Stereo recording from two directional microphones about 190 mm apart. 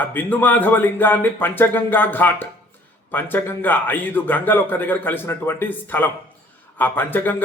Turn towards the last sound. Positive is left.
turn(degrees=10)  # may be behind; listen again after turning